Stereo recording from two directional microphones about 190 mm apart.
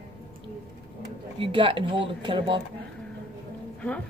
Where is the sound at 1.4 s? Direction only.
25° right (ahead or behind).